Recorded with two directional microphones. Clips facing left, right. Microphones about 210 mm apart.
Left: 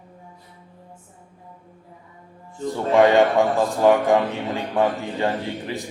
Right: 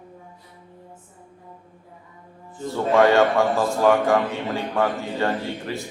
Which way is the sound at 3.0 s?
15° left (ahead or behind).